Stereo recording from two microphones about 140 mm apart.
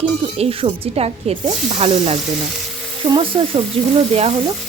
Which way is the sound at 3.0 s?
40° right (ahead or behind).